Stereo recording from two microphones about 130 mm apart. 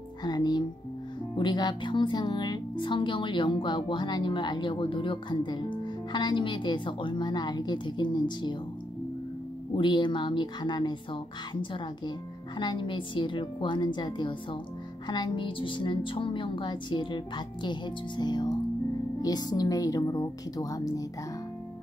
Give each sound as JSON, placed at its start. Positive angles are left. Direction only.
{"t": 0.2, "sound": "music", "side_deg": 30}
{"t": 1.3, "sound": "speech", "side_deg": 35}
{"t": 9.8, "sound": "speech", "side_deg": 35}
{"t": 12.5, "sound": "a woman's voice", "side_deg": 40}